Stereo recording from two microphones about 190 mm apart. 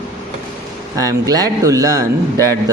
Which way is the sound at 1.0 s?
20° right (ahead or behind).